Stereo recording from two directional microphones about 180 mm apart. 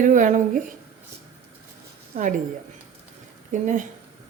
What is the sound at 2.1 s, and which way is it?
Speech, 45° right (ahead or behind).